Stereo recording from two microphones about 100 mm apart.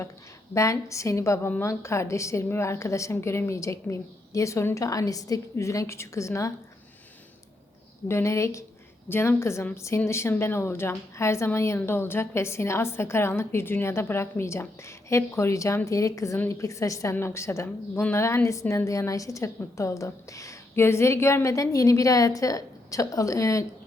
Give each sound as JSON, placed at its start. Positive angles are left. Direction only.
{"t": 0.5, "sound": "a woman's voice", "side_deg": 30}
{"t": 8.0, "sound": "a woman's voice", "side_deg": 30}